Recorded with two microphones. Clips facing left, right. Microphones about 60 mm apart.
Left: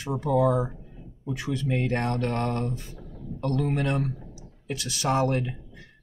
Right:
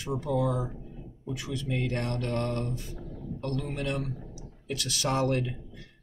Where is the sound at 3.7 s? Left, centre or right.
Left.